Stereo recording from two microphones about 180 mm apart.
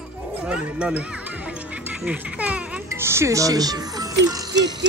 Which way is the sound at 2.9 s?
15° right (ahead or behind).